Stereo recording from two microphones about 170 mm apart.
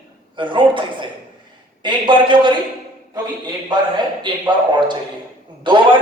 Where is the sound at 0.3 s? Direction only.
30° right (ahead or behind).